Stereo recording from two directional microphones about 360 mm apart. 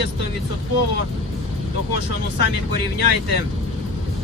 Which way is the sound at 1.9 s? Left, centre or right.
Right.